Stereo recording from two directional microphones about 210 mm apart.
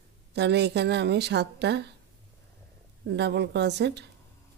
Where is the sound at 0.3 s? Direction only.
55° right (ahead or behind).